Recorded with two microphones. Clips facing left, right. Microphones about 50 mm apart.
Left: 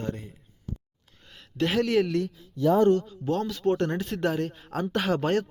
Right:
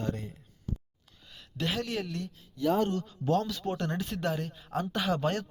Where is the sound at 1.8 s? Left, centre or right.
Left.